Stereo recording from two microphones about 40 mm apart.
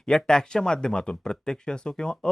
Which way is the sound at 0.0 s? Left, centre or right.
Centre.